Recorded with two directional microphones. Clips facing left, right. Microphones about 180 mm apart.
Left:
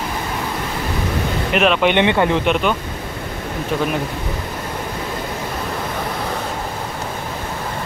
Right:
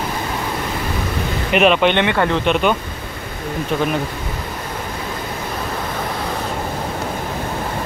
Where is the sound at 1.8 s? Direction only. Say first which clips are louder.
Left 1 dB; 15° left (ahead or behind).